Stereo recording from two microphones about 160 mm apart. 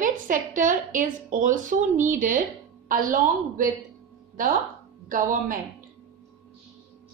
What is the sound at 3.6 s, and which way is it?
Speech, 60° right (ahead or behind).